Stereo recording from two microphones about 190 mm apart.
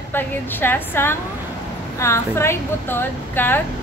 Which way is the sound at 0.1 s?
10° left (ahead or behind).